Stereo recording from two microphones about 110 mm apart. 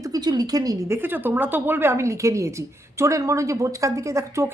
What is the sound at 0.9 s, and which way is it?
A woman's voice, 20° right (ahead or behind).